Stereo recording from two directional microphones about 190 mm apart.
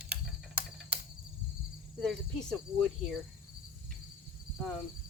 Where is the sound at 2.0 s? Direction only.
5° left (ahead or behind).